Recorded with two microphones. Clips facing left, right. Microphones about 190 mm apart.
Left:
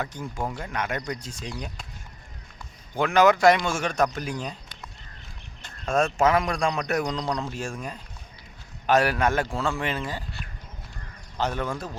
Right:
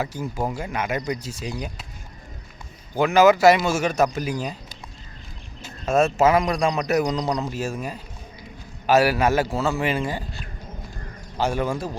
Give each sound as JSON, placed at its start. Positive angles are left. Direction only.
{"t": 0.0, "sound": "speech", "side_deg": -5}
{"t": 2.9, "sound": "a man's voice", "side_deg": -5}
{"t": 5.6, "sound": "a man's voice", "side_deg": -5}
{"t": 11.3, "sound": "speech", "side_deg": -10}